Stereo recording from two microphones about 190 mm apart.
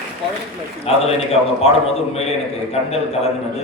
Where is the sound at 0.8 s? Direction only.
35° left (ahead or behind).